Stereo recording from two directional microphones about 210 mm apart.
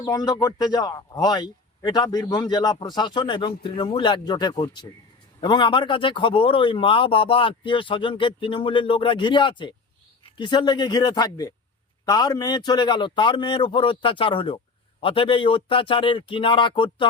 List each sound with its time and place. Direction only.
0.0 s a man's voice: 15° left (ahead or behind)